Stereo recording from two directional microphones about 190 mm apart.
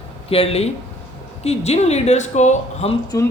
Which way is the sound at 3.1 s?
15° left (ahead or behind).